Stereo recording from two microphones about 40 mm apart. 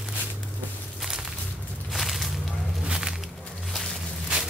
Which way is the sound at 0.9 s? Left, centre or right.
Centre.